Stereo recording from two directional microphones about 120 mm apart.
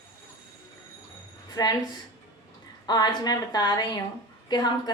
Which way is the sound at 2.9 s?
35° left (ahead or behind).